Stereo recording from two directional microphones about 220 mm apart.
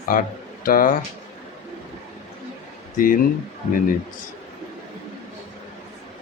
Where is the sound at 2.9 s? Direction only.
40° left (ahead or behind).